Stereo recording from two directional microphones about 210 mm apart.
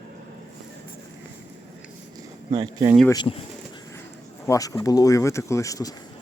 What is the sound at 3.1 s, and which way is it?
Speech, 20° left (ahead or behind).